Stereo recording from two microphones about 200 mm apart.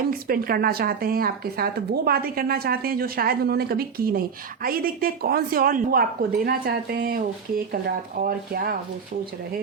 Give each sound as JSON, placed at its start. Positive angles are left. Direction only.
{"t": 0.1, "sound": "speech", "side_deg": -50}